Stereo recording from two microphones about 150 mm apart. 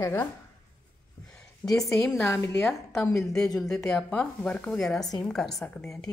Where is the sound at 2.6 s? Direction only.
5° left (ahead or behind).